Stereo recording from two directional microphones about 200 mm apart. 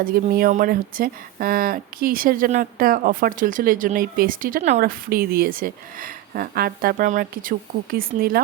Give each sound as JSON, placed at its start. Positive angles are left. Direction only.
{"t": 0.0, "sound": "speech", "side_deg": -45}